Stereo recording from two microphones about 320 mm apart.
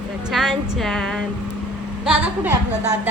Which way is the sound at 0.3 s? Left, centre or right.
Centre.